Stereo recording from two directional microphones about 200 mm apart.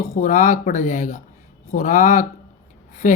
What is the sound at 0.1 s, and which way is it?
Speech, 40° left (ahead or behind).